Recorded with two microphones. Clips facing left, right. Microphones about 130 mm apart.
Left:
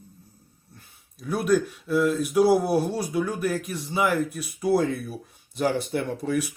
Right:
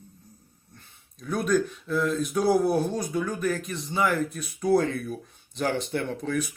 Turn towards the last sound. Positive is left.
turn(degrees=10)  # may be behind; listen again after turning